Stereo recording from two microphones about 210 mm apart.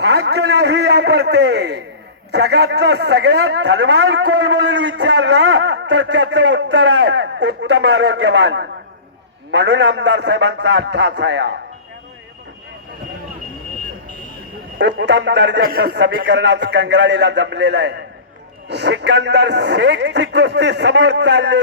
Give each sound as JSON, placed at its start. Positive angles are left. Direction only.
{"t": 0.0, "sound": "a man's voice", "side_deg": -55}
{"t": 14.8, "sound": "a man's voice", "side_deg": -55}